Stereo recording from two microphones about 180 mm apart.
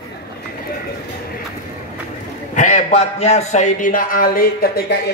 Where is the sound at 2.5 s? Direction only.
40° left (ahead or behind).